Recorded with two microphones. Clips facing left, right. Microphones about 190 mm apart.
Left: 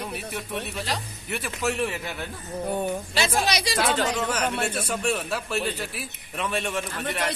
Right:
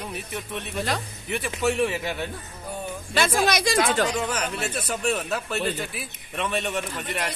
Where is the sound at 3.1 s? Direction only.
50° right (ahead or behind).